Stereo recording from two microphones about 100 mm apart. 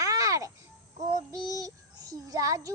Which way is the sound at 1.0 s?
35° right (ahead or behind).